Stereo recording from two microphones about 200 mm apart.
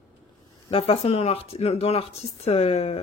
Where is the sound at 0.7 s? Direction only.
30° left (ahead or behind).